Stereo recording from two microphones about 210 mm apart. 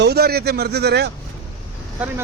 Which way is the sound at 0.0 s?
50° right (ahead or behind).